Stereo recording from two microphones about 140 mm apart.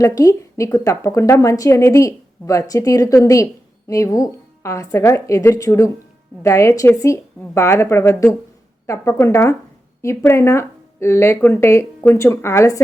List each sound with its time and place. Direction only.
0.0 s a woman's voice: 25° left (ahead or behind)